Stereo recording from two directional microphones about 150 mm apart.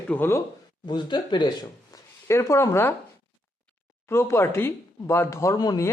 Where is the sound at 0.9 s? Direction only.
30° left (ahead or behind).